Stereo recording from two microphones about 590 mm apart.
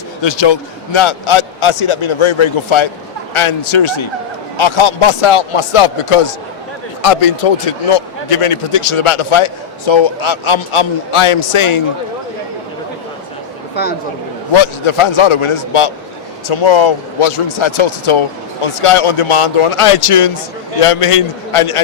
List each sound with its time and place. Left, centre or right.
0.2 s a man's voice: left
14.5 s a man's voice: left